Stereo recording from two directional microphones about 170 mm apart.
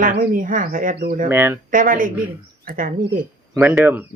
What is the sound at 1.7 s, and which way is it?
Speech, 55° right (ahead or behind).